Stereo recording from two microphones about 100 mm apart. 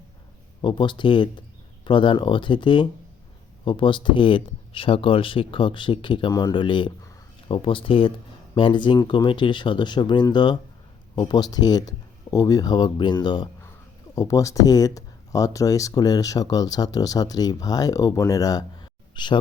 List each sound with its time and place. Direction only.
0.6 s speech: 55° left (ahead or behind)
14.2 s speech: 35° left (ahead or behind); by 19.4 s 50° left (ahead or behind)